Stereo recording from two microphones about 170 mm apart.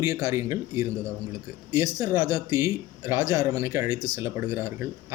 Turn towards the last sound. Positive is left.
turn(degrees=-15)  # may be behind; listen again after turning